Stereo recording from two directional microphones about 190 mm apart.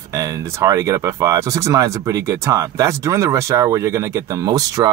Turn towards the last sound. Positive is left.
turn(degrees=-20)  # may be behind; listen again after turning